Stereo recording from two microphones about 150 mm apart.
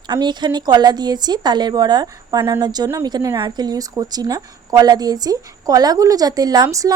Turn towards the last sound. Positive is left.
turn(degrees=-25)  # may be behind; listen again after turning